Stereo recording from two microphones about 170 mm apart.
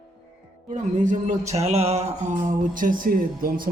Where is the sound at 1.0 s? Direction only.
45° right (ahead or behind).